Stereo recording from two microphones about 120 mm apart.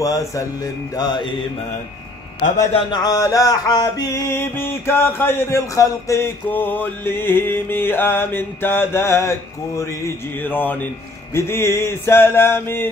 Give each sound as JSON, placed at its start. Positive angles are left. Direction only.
{"t": 0.0, "sound": "music", "side_deg": 30}
{"t": 0.9, "sound": "mantra", "side_deg": 40}
{"t": 2.9, "sound": "music", "side_deg": 30}
{"t": 9.8, "sound": "mantra", "side_deg": 20}
{"t": 11.3, "sound": "music", "side_deg": 20}